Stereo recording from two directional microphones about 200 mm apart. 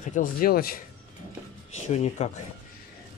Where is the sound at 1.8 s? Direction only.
35° left (ahead or behind).